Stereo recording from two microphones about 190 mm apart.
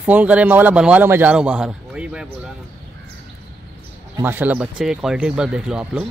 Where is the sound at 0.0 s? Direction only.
10° right (ahead or behind).